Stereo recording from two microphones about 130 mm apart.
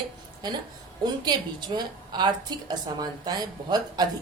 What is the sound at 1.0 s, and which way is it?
A woman's voice, 35° right (ahead or behind).